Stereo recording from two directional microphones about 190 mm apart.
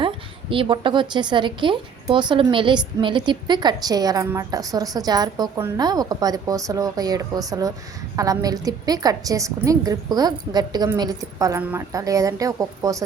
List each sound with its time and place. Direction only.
0.5 s a woman's voice: 25° right (ahead or behind)